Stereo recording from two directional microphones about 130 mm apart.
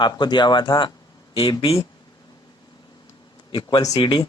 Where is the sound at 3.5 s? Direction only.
35° left (ahead or behind).